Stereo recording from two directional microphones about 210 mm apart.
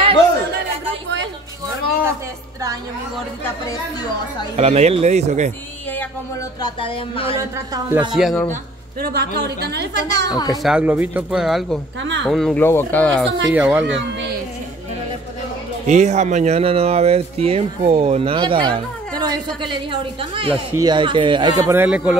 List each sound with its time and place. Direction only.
1.0 s a sound: 60° right (ahead or behind)
4.6 s speech: 30° right (ahead or behind)
6.6 s speech: 25° left (ahead or behind)
7.3 s a man's voice: 15° right (ahead or behind)
8.2 s speech: centre (ahead or behind)
9.0 s a woman's voice: 50° right (ahead or behind)
10.3 s speech: 20° left (ahead or behind)
10.6 s speech: 5° right (ahead or behind)
12.0 s speech: 60° right (ahead or behind)
12.3 s speech: centre (ahead or behind)
13.5 s a man's voice: 5° right (ahead or behind)
13.8 s speech: 55° right (ahead or behind)
15.9 s speech: 35° right (ahead or behind); by 22.1 s 5° right (ahead or behind)